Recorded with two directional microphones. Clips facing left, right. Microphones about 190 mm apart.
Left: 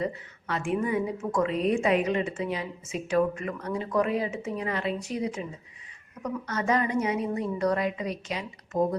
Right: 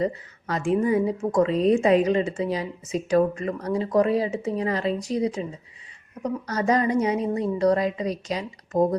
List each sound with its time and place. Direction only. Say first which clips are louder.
0.0 s a woman's voice: right 5 dB; 40° right (ahead or behind)